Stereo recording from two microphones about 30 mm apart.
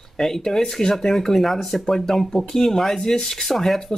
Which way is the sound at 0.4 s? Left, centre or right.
Centre.